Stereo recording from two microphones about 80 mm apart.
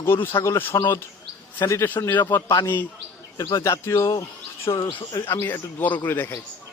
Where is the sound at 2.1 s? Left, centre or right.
Left.